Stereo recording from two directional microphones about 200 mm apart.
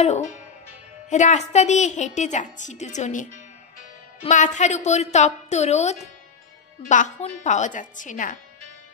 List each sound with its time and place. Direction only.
0.0 s a woman's voice: 35° left (ahead or behind)